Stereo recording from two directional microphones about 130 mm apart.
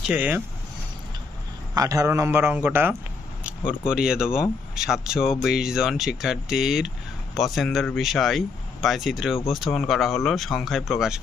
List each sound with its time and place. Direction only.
0.1 s a man's voice: 10° right (ahead or behind)
1.8 s a man's voice: 25° right (ahead or behind); by 11.1 s centre (ahead or behind)